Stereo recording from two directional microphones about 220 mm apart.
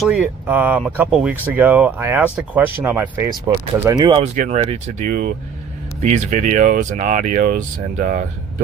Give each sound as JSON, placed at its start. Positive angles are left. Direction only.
{"t": 0.0, "sound": "speech", "side_deg": -5}